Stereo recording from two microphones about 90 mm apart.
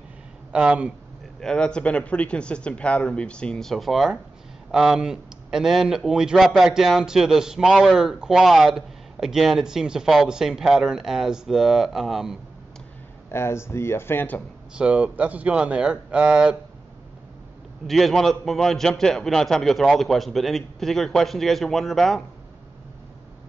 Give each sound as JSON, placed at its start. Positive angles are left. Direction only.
{"t": 0.5, "sound": "speech", "side_deg": -10}
{"t": 1.4, "sound": "a man's voice", "side_deg": 10}
{"t": 13.3, "sound": "speech", "side_deg": 30}
{"t": 14.8, "sound": "speech", "side_deg": -15}
{"t": 17.8, "sound": "a man's voice", "side_deg": 0}